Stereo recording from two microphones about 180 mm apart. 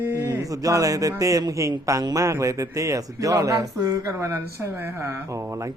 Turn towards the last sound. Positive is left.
turn(degrees=-15)  # may be behind; listen again after turning